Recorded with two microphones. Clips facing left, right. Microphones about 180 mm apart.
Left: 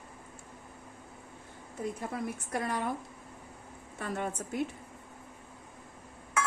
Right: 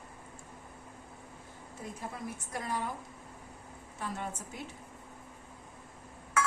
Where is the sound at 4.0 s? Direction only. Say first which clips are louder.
Left 4 dB; 60° left (ahead or behind).